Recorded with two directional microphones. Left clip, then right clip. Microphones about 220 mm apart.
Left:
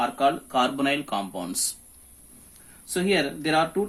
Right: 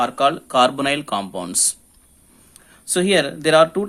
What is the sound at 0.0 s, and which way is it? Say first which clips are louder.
Speech: right 5 dB; 45° right (ahead or behind).